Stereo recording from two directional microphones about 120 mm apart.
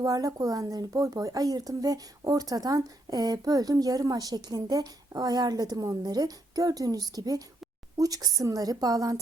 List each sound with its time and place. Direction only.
0.0 s speech: 30° right (ahead or behind)